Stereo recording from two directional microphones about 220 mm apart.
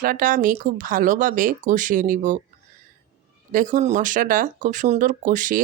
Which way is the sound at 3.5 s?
35° right (ahead or behind).